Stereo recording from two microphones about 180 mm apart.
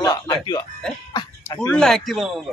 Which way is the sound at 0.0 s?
20° left (ahead or behind).